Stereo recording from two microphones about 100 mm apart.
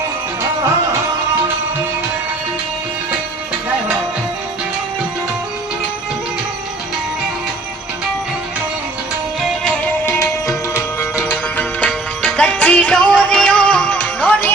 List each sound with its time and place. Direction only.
10.1 s music: 30° left (ahead or behind)
11.2 s music: 15° left (ahead or behind)